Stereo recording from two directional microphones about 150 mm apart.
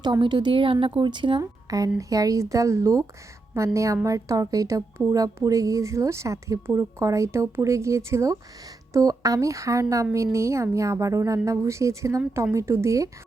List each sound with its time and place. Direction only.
0.0 s a woman's voice: 30° right (ahead or behind)